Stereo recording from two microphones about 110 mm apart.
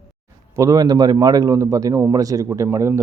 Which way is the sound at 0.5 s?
35° right (ahead or behind).